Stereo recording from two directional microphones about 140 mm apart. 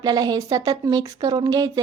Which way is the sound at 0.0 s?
30° right (ahead or behind).